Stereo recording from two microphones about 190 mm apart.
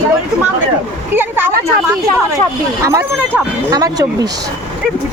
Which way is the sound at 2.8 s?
15° right (ahead or behind).